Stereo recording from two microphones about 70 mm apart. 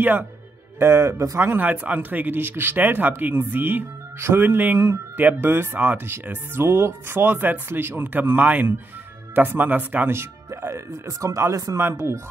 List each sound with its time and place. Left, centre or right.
0.7 s speech: right
1.4 s speech: right